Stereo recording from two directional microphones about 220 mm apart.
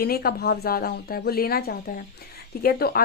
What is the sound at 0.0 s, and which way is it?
Speech, 45° left (ahead or behind).